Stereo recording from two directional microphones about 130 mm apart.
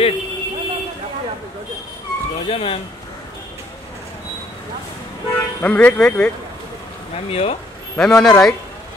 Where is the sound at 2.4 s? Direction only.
50° left (ahead or behind).